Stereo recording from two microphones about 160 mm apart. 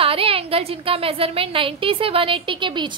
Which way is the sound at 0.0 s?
35° right (ahead or behind).